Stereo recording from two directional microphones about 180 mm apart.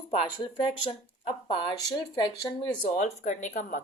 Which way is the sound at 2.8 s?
40° left (ahead or behind).